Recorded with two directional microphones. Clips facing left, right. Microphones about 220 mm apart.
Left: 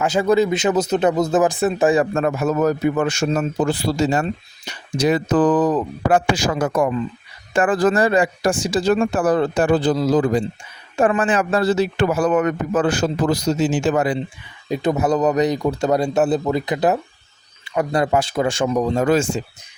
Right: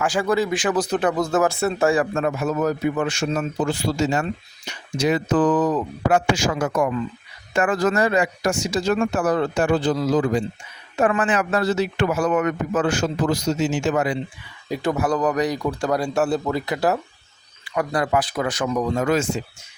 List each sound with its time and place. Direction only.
0.0 s speech: 20° left (ahead or behind)
2.1 s a man's voice: 45° left (ahead or behind)
14.7 s speech: 20° left (ahead or behind)